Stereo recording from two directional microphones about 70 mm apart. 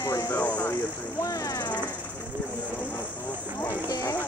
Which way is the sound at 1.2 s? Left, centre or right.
Left.